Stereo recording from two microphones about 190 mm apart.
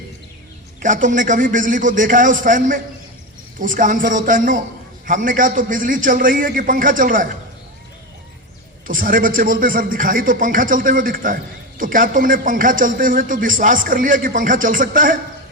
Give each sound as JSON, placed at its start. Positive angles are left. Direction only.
{"t": 0.8, "sound": "a man's voice", "side_deg": -45}
{"t": 8.9, "sound": "a man's voice", "side_deg": -45}